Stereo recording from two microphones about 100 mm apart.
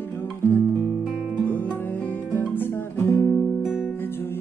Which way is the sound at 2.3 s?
20° left (ahead or behind).